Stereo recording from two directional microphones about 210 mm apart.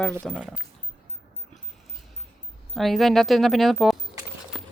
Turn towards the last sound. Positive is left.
turn(degrees=0)  # may be behind; listen again after turning